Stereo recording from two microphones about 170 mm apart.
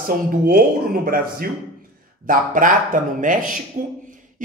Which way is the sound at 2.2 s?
50° right (ahead or behind).